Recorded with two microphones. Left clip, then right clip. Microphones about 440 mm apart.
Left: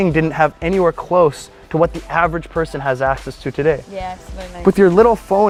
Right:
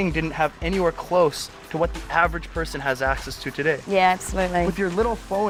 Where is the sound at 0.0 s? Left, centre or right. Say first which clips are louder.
Left 8 dB; left.